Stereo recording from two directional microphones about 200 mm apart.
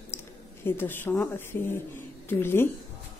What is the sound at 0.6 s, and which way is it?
Speech, 10° left (ahead or behind).